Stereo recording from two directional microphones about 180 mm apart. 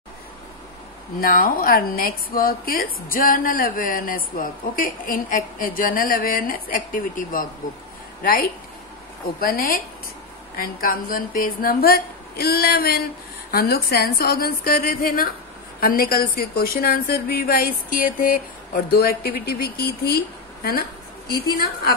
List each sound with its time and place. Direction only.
1.2 s a woman's voice: 50° left (ahead or behind)
21.3 s a woman's voice: 60° left (ahead or behind)